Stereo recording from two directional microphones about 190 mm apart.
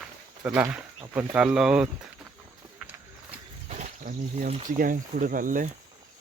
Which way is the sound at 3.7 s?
45° right (ahead or behind).